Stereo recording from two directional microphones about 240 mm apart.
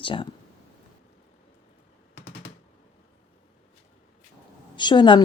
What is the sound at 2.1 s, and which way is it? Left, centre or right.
Machine gun, left.